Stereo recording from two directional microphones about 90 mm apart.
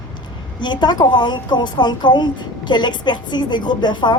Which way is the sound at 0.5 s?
55° left (ahead or behind).